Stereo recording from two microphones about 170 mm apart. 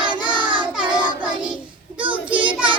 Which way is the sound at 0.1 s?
25° right (ahead or behind).